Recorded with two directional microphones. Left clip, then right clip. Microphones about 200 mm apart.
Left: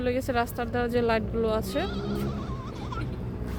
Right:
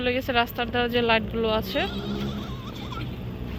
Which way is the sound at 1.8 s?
45° right (ahead or behind).